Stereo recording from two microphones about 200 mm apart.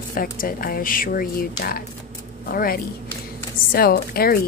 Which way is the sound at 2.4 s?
45° left (ahead or behind).